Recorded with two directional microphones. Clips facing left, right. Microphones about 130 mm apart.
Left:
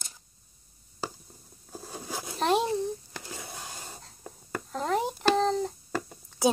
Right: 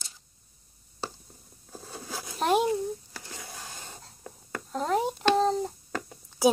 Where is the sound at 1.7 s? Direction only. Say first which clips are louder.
Left 2 dB; 10° left (ahead or behind).